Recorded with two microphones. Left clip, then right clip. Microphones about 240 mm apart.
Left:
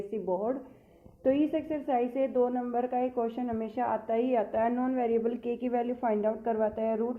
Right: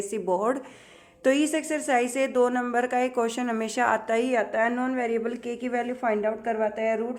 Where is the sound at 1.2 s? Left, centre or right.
Centre.